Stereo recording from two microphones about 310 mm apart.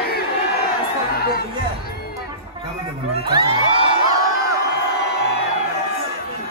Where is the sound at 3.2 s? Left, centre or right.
Centre.